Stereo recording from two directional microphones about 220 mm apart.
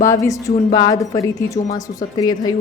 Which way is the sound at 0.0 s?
15° left (ahead or behind).